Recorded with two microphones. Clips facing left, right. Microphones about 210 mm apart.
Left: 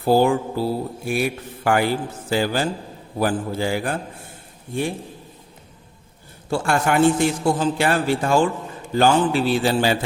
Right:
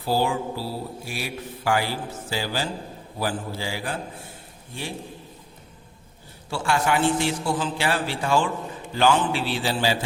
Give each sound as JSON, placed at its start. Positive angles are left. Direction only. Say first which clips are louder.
{"t": 0.0, "sound": "a man's voice", "louder": "left 7 dB", "side_deg": 55}
{"t": 6.5, "sound": "a man's voice", "louder": "left 3 dB", "side_deg": 50}